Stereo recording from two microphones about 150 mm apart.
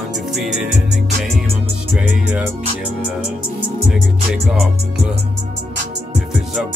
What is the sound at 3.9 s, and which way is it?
Music, centre (ahead or behind).